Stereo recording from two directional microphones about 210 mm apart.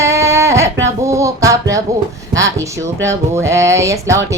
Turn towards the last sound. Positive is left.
turn(degrees=-15)  # may be behind; listen again after turning